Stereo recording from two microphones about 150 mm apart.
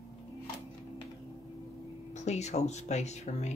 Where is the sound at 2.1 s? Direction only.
50° left (ahead or behind).